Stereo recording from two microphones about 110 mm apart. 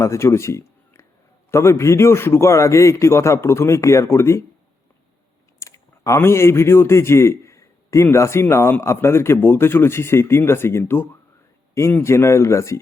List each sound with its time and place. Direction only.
0.0 s a man's voice: 25° left (ahead or behind)
5.5 s a man's voice: 30° left (ahead or behind)